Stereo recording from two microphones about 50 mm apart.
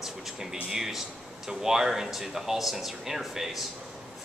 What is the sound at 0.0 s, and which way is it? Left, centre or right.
Speech, centre.